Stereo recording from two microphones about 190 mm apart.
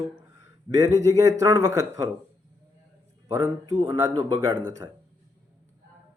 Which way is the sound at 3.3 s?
20° right (ahead or behind).